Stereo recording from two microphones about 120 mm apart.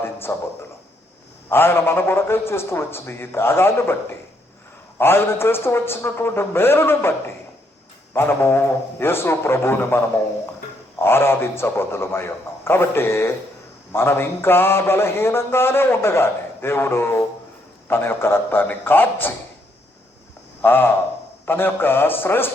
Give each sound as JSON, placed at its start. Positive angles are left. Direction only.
{"t": 0.0, "sound": "a sound", "side_deg": 20}
{"t": 1.5, "sound": "mantra", "side_deg": 20}
{"t": 4.9, "sound": "mantra", "side_deg": 20}
{"t": 8.1, "sound": "mantra", "side_deg": 20}
{"t": 11.0, "sound": "mantra", "side_deg": 20}
{"t": 17.8, "sound": "a man's voice", "side_deg": 20}
{"t": 20.6, "sound": "a man's voice", "side_deg": 15}